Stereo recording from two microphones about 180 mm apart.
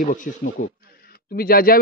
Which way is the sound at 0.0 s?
45° left (ahead or behind).